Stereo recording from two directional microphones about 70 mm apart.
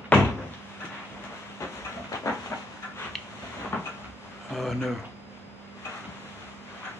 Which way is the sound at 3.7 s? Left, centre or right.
Left.